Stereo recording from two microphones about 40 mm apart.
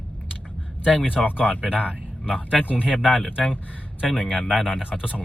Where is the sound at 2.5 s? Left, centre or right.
Left.